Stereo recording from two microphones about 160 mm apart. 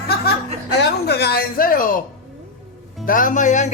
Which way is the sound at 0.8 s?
90° left.